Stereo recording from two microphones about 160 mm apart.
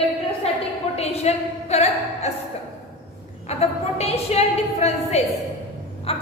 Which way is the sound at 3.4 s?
40° left (ahead or behind).